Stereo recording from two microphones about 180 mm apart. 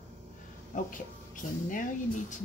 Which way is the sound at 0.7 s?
45° left (ahead or behind).